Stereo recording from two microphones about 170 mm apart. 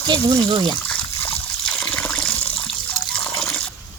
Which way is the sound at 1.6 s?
5° left (ahead or behind).